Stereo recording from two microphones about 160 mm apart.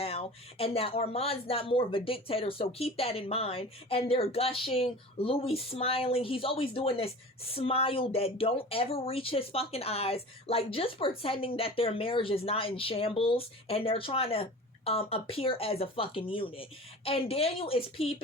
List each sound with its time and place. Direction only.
0.0 s speech: 40° left (ahead or behind)